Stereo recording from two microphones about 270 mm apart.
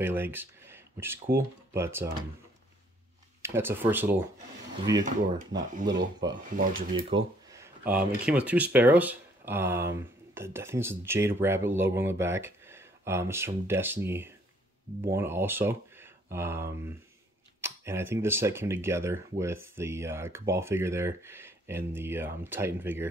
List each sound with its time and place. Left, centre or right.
0.0 s speech: centre
3.4 s speech: centre
5.9 s speech: right
7.0 s speech: centre